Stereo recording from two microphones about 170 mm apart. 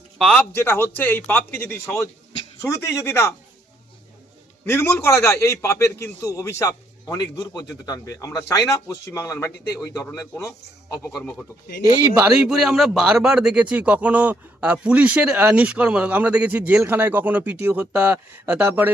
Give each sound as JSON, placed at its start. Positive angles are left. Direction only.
{"t": 0.2, "sound": "a man's voice", "side_deg": 5}
{"t": 4.6, "sound": "a man's voice", "side_deg": 15}
{"t": 11.1, "sound": "a man's voice", "side_deg": 5}